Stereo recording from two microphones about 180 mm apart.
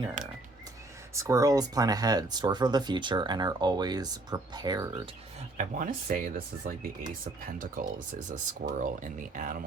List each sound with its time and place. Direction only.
0.2 s speech: 45° right (ahead or behind)
1.1 s speech: 15° right (ahead or behind)
5.5 s speech: 45° right (ahead or behind)